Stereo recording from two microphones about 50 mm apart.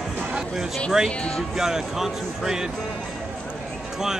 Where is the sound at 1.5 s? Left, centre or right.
Centre.